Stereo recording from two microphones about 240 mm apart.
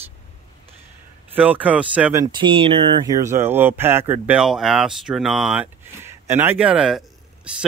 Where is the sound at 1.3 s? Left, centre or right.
Centre.